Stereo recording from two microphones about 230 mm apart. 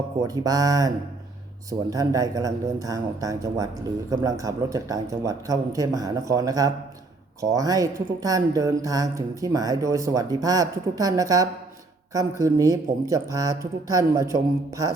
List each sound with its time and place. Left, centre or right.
0.3 s speech: centre